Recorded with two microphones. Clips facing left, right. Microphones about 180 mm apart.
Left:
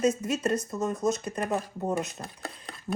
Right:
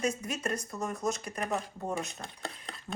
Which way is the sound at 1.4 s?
Centre (ahead or behind).